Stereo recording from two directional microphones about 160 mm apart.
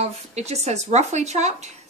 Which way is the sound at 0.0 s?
45° right (ahead or behind).